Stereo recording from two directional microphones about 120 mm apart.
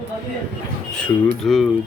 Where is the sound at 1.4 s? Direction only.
5° left (ahead or behind).